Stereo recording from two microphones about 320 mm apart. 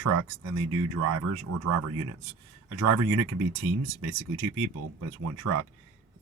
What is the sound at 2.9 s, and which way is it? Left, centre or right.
Speech, right.